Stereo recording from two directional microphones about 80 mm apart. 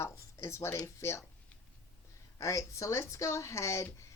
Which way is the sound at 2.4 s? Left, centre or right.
Left.